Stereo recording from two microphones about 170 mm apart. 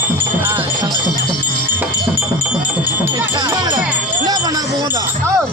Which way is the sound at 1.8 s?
10° right (ahead or behind).